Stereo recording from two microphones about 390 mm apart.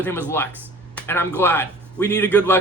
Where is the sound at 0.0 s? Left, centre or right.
Centre.